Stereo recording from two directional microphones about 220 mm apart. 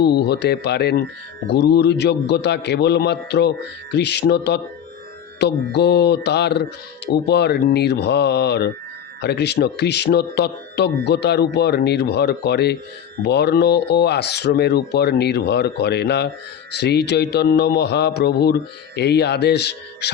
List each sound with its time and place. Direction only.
0.0 s speech: 50° left (ahead or behind)